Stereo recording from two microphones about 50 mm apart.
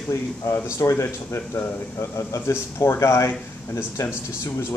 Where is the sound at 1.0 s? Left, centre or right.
Left.